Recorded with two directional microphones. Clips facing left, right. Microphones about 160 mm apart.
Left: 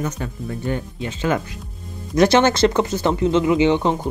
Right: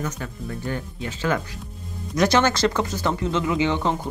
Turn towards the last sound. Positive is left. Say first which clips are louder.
# left 6 dB
turn(degrees=20)  # may be behind; listen again after turning